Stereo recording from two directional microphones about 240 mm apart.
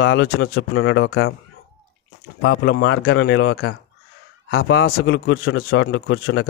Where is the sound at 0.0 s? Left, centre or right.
Left.